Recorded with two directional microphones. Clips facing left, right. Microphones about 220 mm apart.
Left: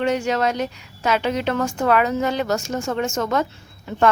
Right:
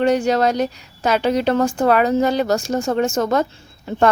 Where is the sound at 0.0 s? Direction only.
35° right (ahead or behind).